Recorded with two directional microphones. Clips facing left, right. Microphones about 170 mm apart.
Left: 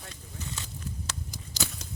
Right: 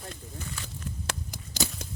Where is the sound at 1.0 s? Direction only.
55° right (ahead or behind).